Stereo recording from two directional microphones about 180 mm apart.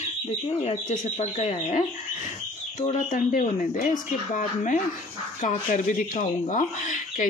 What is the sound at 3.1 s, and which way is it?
Speech, 50° left (ahead or behind).